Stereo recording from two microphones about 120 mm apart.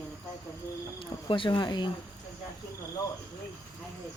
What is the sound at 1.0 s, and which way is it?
Speech, 45° left (ahead or behind).